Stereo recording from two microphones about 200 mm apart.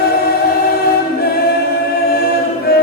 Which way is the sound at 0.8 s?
50° left (ahead or behind).